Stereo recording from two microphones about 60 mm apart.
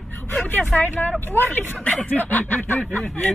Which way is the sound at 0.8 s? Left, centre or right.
Left.